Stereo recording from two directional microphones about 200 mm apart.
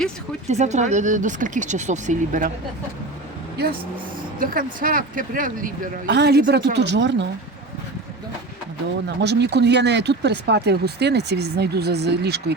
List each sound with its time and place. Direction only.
0.4 s speech: 35° right (ahead or behind)
4.4 s speech: 45° right (ahead or behind)
6.1 s speech: 60° right (ahead or behind)
9.0 s speech: 60° right (ahead or behind)